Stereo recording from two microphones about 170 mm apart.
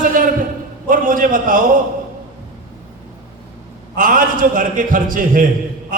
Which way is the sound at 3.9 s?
50° right (ahead or behind).